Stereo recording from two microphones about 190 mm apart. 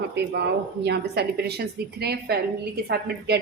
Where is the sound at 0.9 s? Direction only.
60° right (ahead or behind).